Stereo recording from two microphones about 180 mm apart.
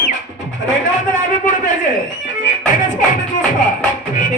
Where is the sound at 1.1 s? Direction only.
45° left (ahead or behind).